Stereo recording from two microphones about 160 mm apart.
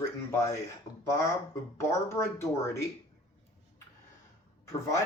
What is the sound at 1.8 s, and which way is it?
Speech, 15° left (ahead or behind).